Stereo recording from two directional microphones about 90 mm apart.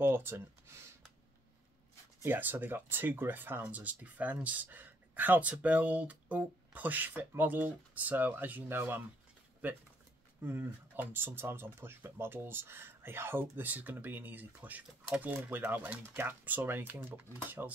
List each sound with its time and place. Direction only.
0.0 s speech: 25° right (ahead or behind)
2.2 s speech: 20° right (ahead or behind)
10.4 s speech: 25° right (ahead or behind)